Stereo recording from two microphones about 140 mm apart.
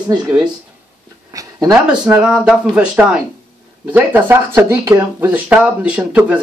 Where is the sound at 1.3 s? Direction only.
25° right (ahead or behind).